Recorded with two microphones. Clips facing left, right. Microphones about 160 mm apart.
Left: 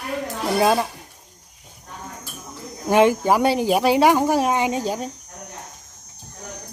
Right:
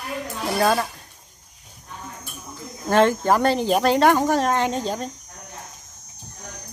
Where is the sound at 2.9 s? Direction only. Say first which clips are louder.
Left 1 dB; 10° left (ahead or behind).